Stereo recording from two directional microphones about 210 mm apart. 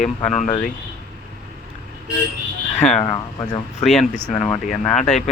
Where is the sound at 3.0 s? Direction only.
20° left (ahead or behind).